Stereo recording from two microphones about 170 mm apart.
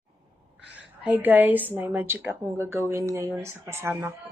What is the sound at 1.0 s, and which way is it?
A woman's voice, 10° right (ahead or behind).